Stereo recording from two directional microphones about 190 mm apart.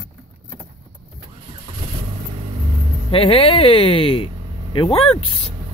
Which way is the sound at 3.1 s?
30° left (ahead or behind).